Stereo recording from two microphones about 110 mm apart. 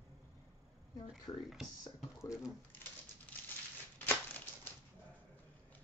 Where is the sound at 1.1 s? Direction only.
5° right (ahead or behind).